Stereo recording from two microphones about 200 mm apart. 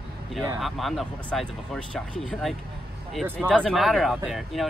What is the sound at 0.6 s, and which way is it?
Speech, centre (ahead or behind).